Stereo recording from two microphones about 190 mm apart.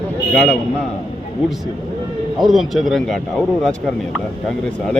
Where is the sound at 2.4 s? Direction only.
Centre (ahead or behind).